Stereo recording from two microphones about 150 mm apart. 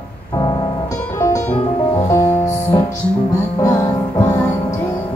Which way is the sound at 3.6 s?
25° left (ahead or behind).